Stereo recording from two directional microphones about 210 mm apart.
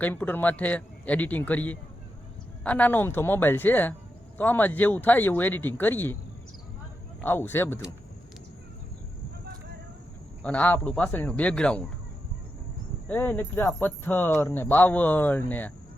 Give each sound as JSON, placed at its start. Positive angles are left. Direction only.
{"t": 0.0, "sound": "speech", "side_deg": 10}
{"t": 7.2, "sound": "speech", "side_deg": 10}
{"t": 10.4, "sound": "speech", "side_deg": 5}
{"t": 13.1, "sound": "speech", "side_deg": 10}